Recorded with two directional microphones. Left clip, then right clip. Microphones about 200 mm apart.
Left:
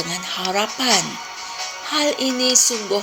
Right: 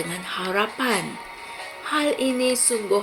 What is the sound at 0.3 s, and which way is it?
Speech, 35° left (ahead or behind).